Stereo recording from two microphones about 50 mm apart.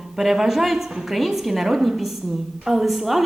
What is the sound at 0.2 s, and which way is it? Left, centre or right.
A woman's voice, centre.